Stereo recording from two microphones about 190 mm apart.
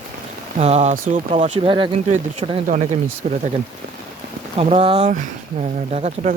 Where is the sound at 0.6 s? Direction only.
35° right (ahead or behind).